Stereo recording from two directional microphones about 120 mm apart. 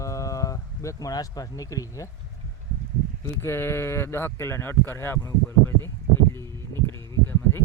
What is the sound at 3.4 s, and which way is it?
Speech, 20° left (ahead or behind).